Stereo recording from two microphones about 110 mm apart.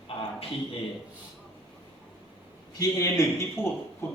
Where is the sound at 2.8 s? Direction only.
30° left (ahead or behind).